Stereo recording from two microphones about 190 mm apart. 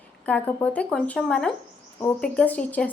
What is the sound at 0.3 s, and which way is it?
Speech, 5° left (ahead or behind).